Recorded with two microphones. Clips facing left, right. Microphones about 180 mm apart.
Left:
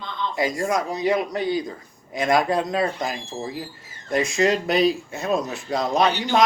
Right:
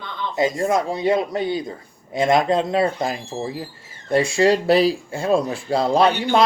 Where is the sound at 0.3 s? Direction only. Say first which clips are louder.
Right 4 dB; 25° right (ahead or behind).